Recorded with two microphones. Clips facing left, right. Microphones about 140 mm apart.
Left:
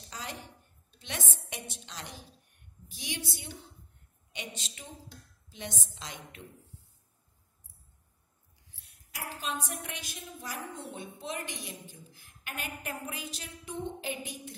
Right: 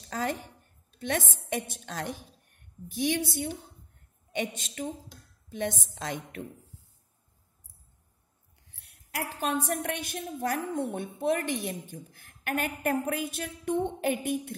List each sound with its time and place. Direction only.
0.1 s a woman's voice: 50° right (ahead or behind)
4.6 s a woman's voice: 50° right (ahead or behind)
8.7 s a woman's voice: 65° right (ahead or behind)